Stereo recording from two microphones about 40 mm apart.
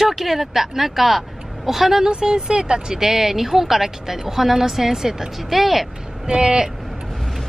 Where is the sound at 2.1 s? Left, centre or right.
Right.